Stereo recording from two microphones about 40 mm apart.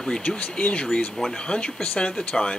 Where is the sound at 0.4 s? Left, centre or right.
Left.